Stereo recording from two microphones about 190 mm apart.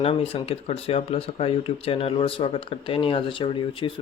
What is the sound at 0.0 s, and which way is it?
Speech, 30° left (ahead or behind).